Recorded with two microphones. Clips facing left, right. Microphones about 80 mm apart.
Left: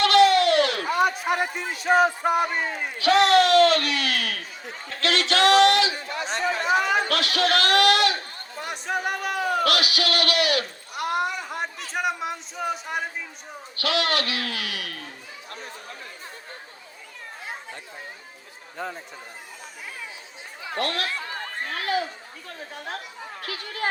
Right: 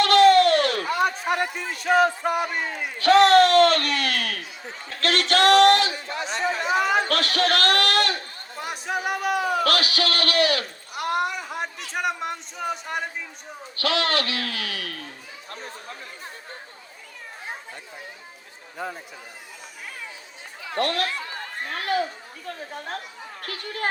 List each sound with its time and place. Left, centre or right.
0.0 s a sound: right
0.9 s a man's voice: centre
3.0 s speech: right
6.7 s speech: centre
7.1 s speech: right
8.5 s speech: centre
9.6 s a man's voice: right
10.9 s a sound: centre
11.9 s speech: centre
13.7 s a man's voice: right
15.4 s chatter: right
18.8 s speech: centre
21.7 s speech: right
23.4 s speech: right